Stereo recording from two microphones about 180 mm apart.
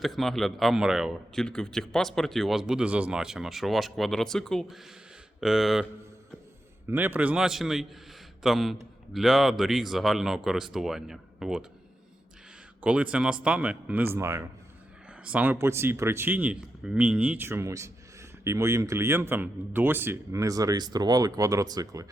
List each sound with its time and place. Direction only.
0.0 s speech: centre (ahead or behind)
6.9 s speech: 10° right (ahead or behind)
12.8 s a man's voice: 5° right (ahead or behind)